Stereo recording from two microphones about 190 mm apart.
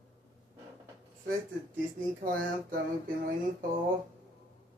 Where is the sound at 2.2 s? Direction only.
45° right (ahead or behind).